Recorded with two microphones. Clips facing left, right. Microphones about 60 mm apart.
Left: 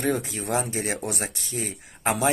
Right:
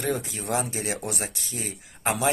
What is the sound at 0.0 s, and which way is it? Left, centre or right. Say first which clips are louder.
A man's voice: left 2 dB; left.